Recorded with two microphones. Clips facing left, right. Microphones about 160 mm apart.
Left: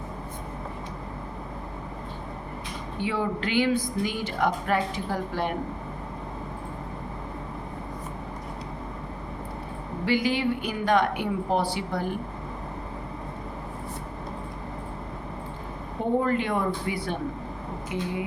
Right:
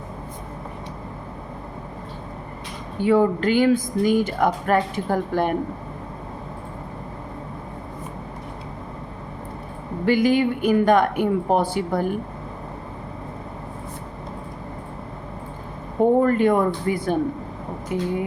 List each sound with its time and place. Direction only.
3.0 s speech: 45° right (ahead or behind)
10.1 s speech: 50° right (ahead or behind)
16.2 s speech: 50° right (ahead or behind)